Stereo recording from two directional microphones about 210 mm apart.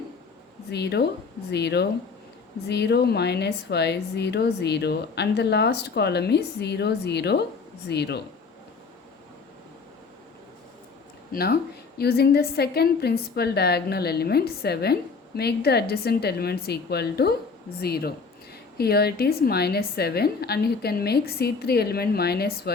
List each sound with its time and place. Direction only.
0.7 s a woman's voice: 50° left (ahead or behind)
11.3 s a woman's voice: 45° left (ahead or behind)